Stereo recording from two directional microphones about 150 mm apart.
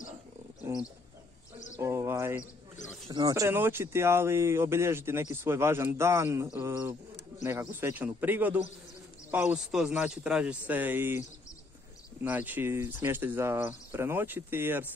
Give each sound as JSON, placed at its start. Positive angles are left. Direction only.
{"t": 0.7, "sound": "speech", "side_deg": -20}
{"t": 1.8, "sound": "bird", "side_deg": -20}
{"t": 3.1, "sound": "speech", "side_deg": -25}